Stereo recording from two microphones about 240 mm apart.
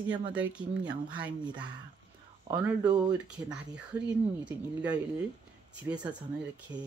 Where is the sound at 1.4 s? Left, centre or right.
Centre.